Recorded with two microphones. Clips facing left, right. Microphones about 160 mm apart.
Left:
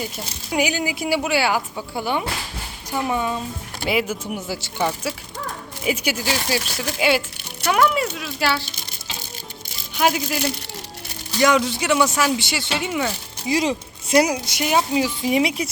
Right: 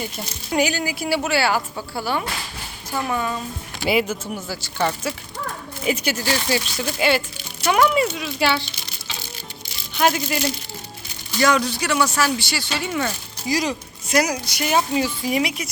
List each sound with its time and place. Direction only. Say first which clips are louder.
0.5 s speech: right 1 dB; 15° left (ahead or behind)
3.8 s speech: right 2 dB; 5° left (ahead or behind)
4.4 s speech: left 2 dB; 20° left (ahead or behind)
4.8 s speech: right 1 dB; 5° left (ahead or behind)
9.9 s speech: even; 10° left (ahead or behind)
11.3 s speech: left 1 dB; 20° left (ahead or behind)
13.5 s speech: left 2 dB; 25° left (ahead or behind)
14.8 s speech: left 1 dB; 10° left (ahead or behind); by 15.7 s 30° left (ahead or behind)